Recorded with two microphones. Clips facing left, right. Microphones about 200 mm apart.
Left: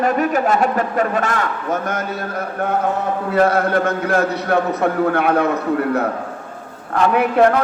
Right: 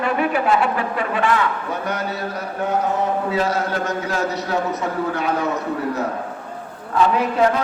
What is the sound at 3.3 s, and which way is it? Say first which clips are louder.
A man's voice: left 6 dB; 55° left (ahead or behind).